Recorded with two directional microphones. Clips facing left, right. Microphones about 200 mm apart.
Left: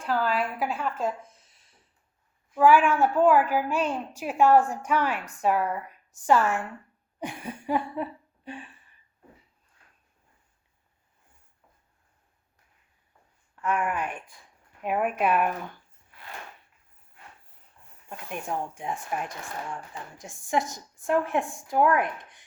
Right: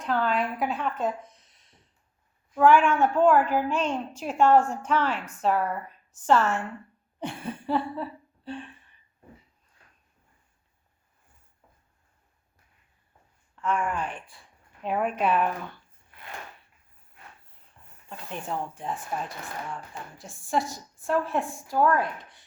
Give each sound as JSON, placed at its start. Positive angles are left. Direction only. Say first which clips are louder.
{"t": 0.0, "sound": "a woman's voice", "louder": "even", "side_deg": 0}
{"t": 7.2, "sound": "a sound", "louder": "right 2 dB", "side_deg": 10}
{"t": 8.4, "sound": "a woman's voice", "louder": "right 3 dB", "side_deg": 10}
{"t": 13.6, "sound": "a woman's voice", "louder": "even", "side_deg": 5}
{"t": 18.3, "sound": "a woman's voice", "louder": "left 1 dB", "side_deg": 10}